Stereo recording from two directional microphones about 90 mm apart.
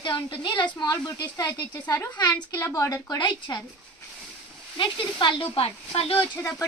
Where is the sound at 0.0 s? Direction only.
60° left (ahead or behind).